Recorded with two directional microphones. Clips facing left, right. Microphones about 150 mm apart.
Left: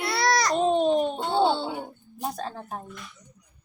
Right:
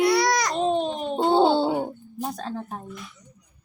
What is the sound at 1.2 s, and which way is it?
Wail, 30° right (ahead or behind).